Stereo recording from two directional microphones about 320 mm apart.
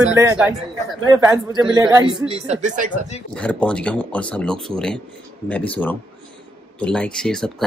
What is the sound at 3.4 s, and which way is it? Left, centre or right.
Speech, centre.